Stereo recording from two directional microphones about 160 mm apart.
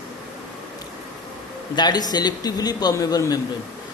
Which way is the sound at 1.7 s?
25° left (ahead or behind).